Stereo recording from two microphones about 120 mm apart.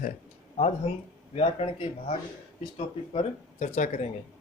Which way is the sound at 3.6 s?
80° left.